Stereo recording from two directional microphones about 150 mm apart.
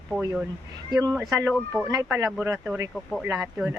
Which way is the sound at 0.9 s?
25° right (ahead or behind).